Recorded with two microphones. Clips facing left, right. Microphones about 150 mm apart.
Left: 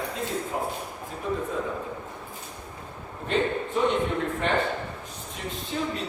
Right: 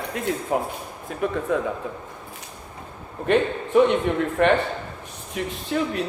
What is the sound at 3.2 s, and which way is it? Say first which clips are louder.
Speech: right 5 dB; 65° right (ahead or behind).